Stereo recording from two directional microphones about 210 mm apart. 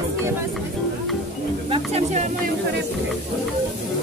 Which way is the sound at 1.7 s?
30° right (ahead or behind).